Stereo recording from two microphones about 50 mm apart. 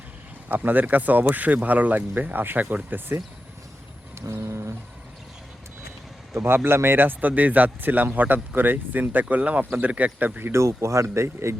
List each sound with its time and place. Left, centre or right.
0.4 s a man's voice: right
4.3 s a sound: right
6.7 s a man's voice: right
10.5 s speech: right